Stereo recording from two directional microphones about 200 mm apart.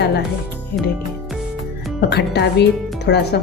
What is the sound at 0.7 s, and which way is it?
Music, 50° left (ahead or behind).